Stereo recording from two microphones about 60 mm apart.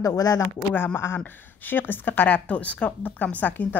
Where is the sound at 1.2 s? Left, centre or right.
Left.